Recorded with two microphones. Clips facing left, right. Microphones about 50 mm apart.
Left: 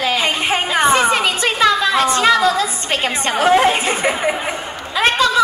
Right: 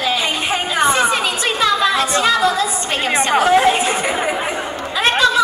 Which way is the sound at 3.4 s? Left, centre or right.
Left.